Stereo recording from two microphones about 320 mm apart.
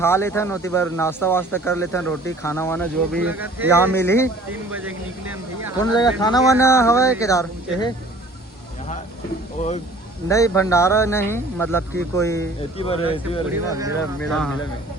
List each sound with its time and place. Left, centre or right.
0.0 s a man's voice: centre
3.9 s a man's voice: centre
5.8 s a man's voice: centre
9.6 s speech: left
10.2 s a man's voice: centre
14.3 s speech: centre